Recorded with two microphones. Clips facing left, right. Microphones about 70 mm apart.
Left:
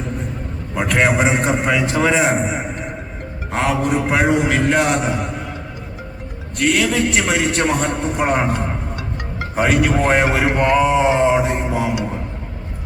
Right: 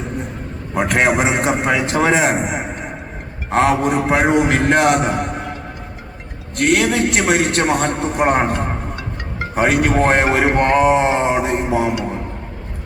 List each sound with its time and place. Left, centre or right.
0.9 s a man's voice: right
1.3 s a man's voice: right
3.5 s a man's voice: right
6.7 s a man's voice: right